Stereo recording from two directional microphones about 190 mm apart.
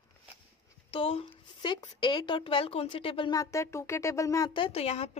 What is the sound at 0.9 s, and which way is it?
A woman's voice, 30° left (ahead or behind).